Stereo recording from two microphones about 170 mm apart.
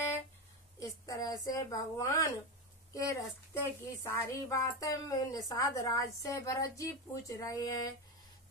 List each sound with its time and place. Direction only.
0.7 s a woman's voice: 20° left (ahead or behind)